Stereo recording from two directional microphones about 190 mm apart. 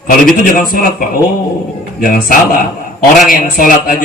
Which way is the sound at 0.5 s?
45° left (ahead or behind).